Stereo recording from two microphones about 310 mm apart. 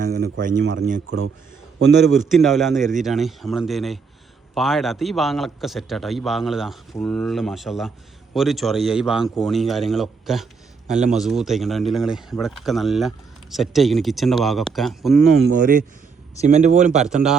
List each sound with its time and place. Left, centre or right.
0.0 s speech: right
2.3 s speech: centre
15.4 s speech: right